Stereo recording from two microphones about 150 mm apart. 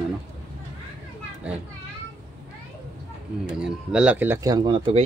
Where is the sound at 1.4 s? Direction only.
10° right (ahead or behind).